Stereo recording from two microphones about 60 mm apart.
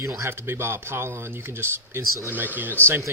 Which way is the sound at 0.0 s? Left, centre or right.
Right.